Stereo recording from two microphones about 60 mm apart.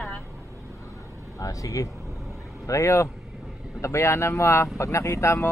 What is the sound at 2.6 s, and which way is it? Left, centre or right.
Speech, left.